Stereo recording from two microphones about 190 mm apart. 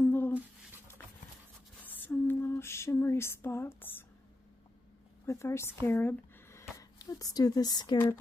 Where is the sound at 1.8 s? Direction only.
10° left (ahead or behind).